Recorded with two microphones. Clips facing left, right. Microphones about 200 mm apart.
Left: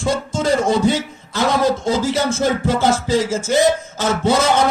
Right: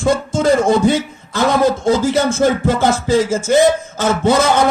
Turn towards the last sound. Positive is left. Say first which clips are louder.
# right 2 dB
turn(degrees=-50)  # may be behind; listen again after turning